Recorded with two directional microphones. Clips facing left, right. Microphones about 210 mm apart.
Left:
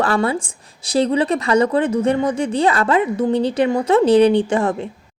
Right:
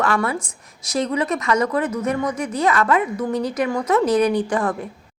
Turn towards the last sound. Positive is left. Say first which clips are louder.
# left 3 dB
turn(degrees=25)  # may be behind; listen again after turning